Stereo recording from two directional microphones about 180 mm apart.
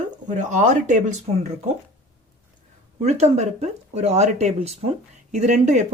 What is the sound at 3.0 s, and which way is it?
Speech, 35° right (ahead or behind).